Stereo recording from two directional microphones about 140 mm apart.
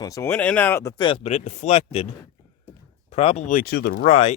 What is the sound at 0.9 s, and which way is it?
Speech, 35° left (ahead or behind).